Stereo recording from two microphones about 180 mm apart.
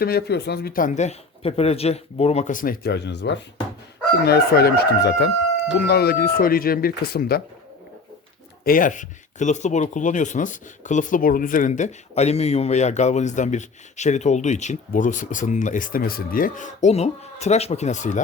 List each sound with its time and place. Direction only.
0.0 s speech: 60° left (ahead or behind)
8.6 s speech: 50° left (ahead or behind)